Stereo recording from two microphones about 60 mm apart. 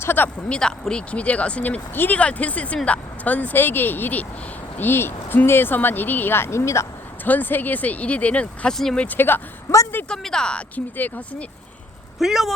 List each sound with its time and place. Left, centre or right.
0.0 s a sound: left
0.4 s speech: centre; by 6.8 s left
7.3 s speech: left
10.1 s speech: centre
10.8 s speech: left
12.2 s speech: centre